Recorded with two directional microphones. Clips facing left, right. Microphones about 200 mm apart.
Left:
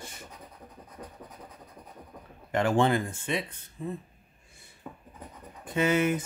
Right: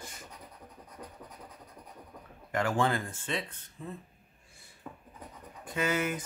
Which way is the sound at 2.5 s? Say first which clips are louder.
Left 5 dB; 25° left (ahead or behind).